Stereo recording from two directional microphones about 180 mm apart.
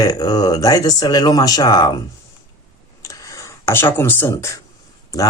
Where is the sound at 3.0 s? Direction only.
20° left (ahead or behind).